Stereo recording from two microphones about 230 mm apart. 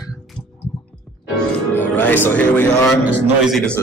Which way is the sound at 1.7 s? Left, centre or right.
Centre.